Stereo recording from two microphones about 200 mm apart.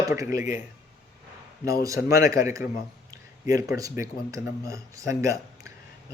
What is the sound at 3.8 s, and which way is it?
Speech, 15° right (ahead or behind).